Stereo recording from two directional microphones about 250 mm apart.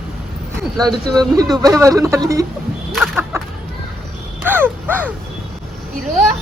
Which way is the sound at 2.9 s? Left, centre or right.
Centre.